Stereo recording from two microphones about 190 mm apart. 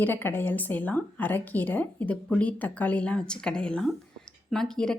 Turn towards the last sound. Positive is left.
turn(degrees=5)  # may be behind; listen again after turning